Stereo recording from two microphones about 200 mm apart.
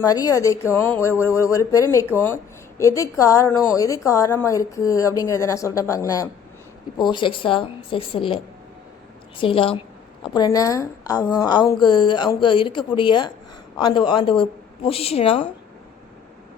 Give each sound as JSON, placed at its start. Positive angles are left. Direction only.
{"t": 0.0, "sound": "a woman's voice", "side_deg": 15}
{"t": 9.4, "sound": "a woman's voice", "side_deg": 25}